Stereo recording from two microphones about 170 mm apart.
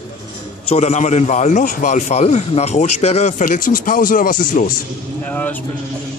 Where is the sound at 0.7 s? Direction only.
40° left (ahead or behind).